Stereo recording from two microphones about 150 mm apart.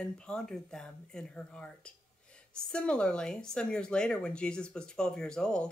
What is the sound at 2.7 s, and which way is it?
Speech, 5° left (ahead or behind).